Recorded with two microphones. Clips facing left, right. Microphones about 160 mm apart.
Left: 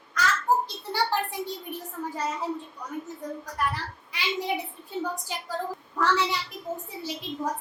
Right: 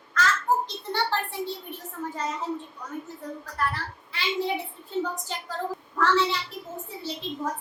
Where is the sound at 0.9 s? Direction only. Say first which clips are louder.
Left 1 dB; 15° left (ahead or behind).